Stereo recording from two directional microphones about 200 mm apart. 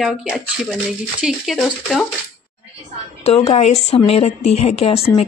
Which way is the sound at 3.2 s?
30° left (ahead or behind).